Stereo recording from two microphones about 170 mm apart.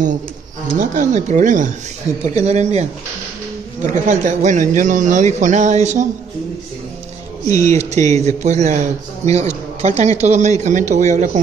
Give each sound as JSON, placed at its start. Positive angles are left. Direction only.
{"t": 0.7, "sound": "a man's voice", "side_deg": -45}
{"t": 7.4, "sound": "speech", "side_deg": 20}
{"t": 7.7, "sound": "a man's voice", "side_deg": -40}